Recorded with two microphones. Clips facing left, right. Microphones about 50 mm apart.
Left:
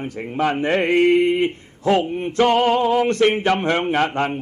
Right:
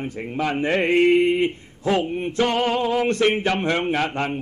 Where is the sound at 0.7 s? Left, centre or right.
Centre.